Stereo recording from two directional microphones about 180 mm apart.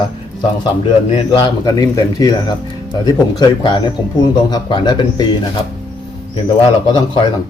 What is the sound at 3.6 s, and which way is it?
Speech, 25° left (ahead or behind).